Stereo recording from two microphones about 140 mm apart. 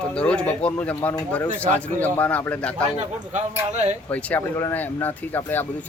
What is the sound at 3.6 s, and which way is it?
Speech, 55° right (ahead or behind).